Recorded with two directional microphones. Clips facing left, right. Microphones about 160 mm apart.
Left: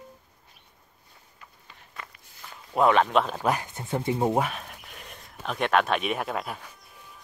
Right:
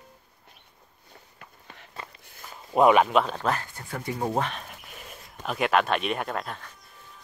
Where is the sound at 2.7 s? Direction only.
15° right (ahead or behind).